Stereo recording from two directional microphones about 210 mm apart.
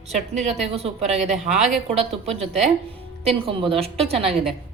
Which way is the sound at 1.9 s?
30° right (ahead or behind).